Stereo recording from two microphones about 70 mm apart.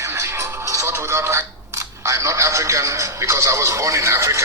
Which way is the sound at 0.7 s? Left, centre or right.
Right.